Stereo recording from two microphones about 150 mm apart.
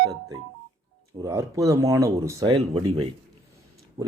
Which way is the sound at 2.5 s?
35° right (ahead or behind).